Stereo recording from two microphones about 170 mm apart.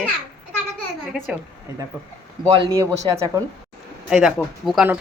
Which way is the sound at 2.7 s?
20° right (ahead or behind).